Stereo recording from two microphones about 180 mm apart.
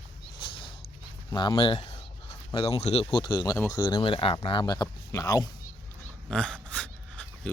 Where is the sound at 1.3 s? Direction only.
25° left (ahead or behind).